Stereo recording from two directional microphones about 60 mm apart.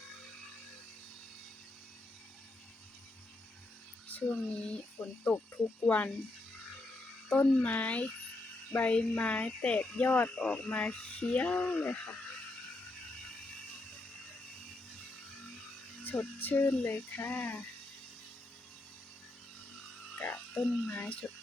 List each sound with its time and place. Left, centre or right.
4.3 s speech: centre
7.3 s speech: left
16.0 s speech: left
20.3 s speech: left